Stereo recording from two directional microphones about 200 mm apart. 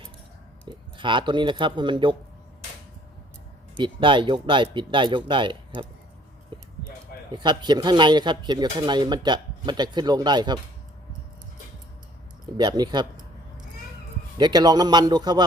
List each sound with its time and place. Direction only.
0.9 s speech: 25° right (ahead or behind)
3.8 s speech: 25° right (ahead or behind)
6.5 s a sound: 25° right (ahead or behind)
7.3 s speech: 20° right (ahead or behind)
12.5 s a sound: 20° right (ahead or behind)
14.3 s speech: 20° right (ahead or behind)